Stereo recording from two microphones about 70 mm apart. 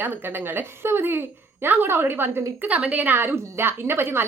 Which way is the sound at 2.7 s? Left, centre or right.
Right.